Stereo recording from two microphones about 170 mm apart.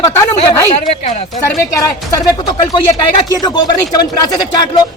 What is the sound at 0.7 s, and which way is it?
Speech, 40° left (ahead or behind).